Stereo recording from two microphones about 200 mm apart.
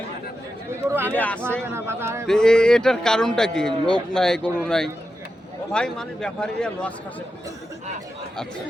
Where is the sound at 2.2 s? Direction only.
5° left (ahead or behind).